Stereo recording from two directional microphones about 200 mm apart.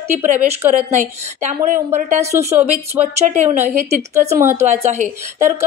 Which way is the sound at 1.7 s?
35° right (ahead or behind).